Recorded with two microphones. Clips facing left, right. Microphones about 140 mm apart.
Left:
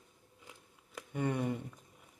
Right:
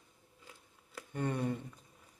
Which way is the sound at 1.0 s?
15° left (ahead or behind).